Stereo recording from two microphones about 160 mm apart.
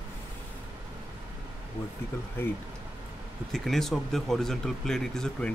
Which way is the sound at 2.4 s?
15° left (ahead or behind).